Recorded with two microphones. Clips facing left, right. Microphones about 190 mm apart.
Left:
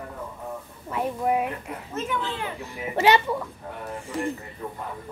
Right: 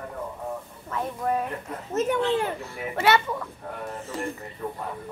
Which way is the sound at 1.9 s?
45° right (ahead or behind).